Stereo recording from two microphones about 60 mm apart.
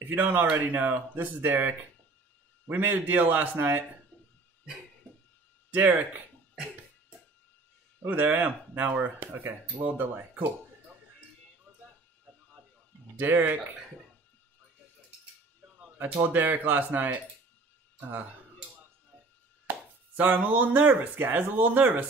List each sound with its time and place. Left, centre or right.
0.1 s a man's voice: right
4.1 s a sound: left
5.8 s a man's voice: right
8.1 s speech: right
13.1 s speech: right
16.2 s a man's voice: right
19.6 s speech: right